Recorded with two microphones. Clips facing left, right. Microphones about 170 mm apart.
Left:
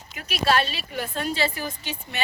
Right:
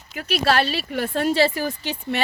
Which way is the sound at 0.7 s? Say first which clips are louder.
Right 7 dB; 65° right (ahead or behind).